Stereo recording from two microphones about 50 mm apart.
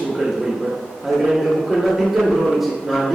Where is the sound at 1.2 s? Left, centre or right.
Centre.